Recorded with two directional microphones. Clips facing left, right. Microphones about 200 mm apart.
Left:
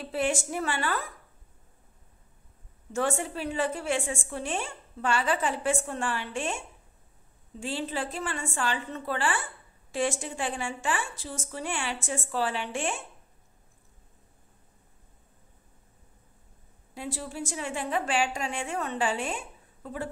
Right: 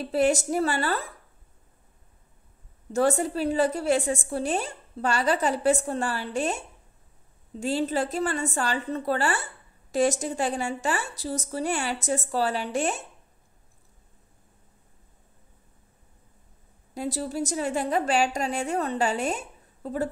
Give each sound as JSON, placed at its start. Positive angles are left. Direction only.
{"t": 0.0, "sound": "a woman's voice", "side_deg": -40}
{"t": 2.9, "sound": "a woman's voice", "side_deg": -40}
{"t": 7.6, "sound": "a woman's voice", "side_deg": -40}
{"t": 16.9, "sound": "a woman's voice", "side_deg": -40}